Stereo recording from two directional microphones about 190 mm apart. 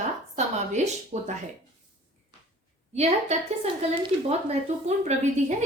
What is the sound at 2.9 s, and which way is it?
Speech, 35° right (ahead or behind).